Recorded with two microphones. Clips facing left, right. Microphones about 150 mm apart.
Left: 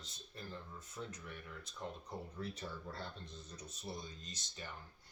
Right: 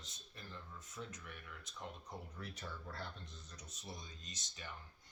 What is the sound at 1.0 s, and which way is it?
Speech, 30° left (ahead or behind).